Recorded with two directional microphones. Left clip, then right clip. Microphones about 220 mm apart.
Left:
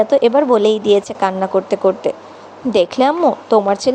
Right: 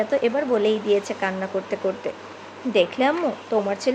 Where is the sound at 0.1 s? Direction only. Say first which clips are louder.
Left 9 dB; 30° left (ahead or behind).